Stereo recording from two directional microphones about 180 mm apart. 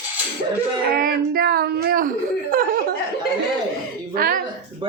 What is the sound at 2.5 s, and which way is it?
Laughter, 55° right (ahead or behind).